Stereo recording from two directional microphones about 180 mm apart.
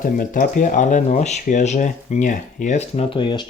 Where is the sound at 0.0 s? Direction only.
50° left (ahead or behind).